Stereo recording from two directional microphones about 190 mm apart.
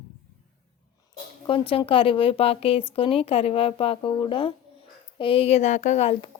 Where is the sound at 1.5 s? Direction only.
25° left (ahead or behind).